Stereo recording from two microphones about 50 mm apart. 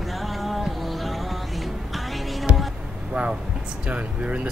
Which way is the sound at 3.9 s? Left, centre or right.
Right.